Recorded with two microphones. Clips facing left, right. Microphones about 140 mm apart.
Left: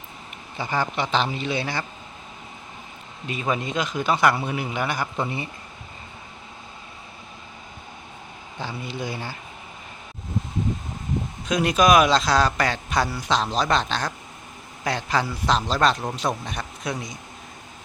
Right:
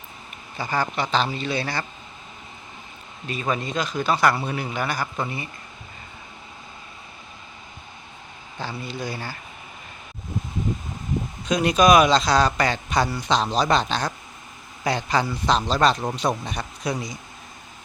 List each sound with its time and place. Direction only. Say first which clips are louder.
0.5 s a man's voice: even; 15° left (ahead or behind)
3.5 s a man's voice: even; 20° left (ahead or behind)
8.5 s speech: even; 15° left (ahead or behind)
11.4 s speech: right 1 dB; 5° left (ahead or behind)